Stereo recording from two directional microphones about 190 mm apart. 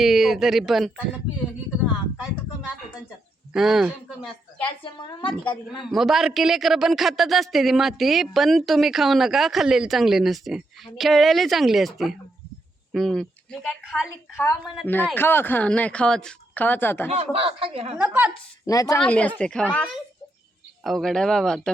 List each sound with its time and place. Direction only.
0.0 s speech: centre (ahead or behind)
3.5 s speech: centre (ahead or behind)
4.6 s a woman's voice: 25° left (ahead or behind)
5.8 s a woman's voice: centre (ahead or behind)
17.3 s speech: 30° right (ahead or behind)
17.9 s a woman's voice: 10° right (ahead or behind)
18.6 s a woman's voice: 20° left (ahead or behind)
18.9 s a woman's voice: 5° left (ahead or behind)